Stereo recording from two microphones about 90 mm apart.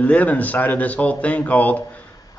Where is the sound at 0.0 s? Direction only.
15° left (ahead or behind).